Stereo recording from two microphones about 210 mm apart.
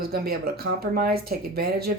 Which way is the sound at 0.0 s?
45° right (ahead or behind).